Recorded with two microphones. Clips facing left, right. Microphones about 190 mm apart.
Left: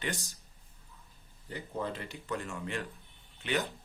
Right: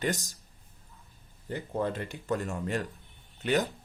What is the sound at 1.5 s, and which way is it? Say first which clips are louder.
Speech: right 5 dB; 50° right (ahead or behind).